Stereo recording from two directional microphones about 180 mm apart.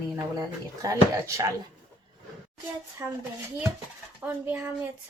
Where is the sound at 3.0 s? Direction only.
20° right (ahead or behind).